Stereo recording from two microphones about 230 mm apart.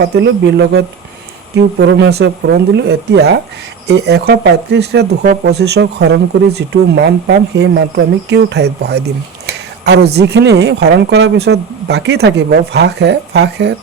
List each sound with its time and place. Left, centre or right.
0.0 s speech: right